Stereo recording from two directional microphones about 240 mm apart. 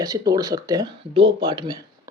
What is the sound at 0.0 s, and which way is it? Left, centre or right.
Speech, centre.